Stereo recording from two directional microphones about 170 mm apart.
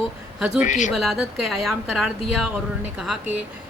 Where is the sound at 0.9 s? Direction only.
Centre (ahead or behind).